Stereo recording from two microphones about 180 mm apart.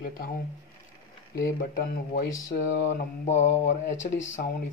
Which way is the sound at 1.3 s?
60° left (ahead or behind).